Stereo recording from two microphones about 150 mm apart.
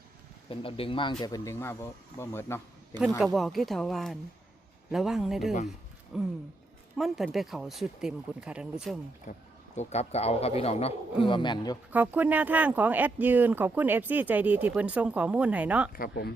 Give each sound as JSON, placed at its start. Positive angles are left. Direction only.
{"t": 0.5, "sound": "speech", "side_deg": 35}
{"t": 1.2, "sound": "speech", "side_deg": 20}
{"t": 2.9, "sound": "speech", "side_deg": -30}
{"t": 3.3, "sound": "speech", "side_deg": 0}
{"t": 9.3, "sound": "speech", "side_deg": 55}
{"t": 9.7, "sound": "a man's voice", "side_deg": 45}
{"t": 11.9, "sound": "speech", "side_deg": -10}
{"t": 15.9, "sound": "speech", "side_deg": 75}